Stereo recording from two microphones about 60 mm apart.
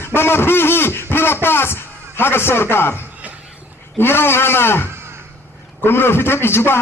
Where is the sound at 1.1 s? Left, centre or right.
Left.